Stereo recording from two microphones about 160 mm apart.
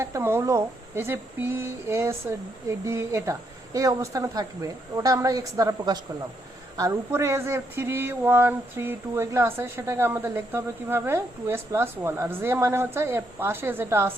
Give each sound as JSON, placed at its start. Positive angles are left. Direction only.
{"t": 0.0, "sound": "speech", "side_deg": -15}